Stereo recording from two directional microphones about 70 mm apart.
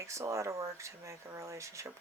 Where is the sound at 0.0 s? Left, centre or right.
Right.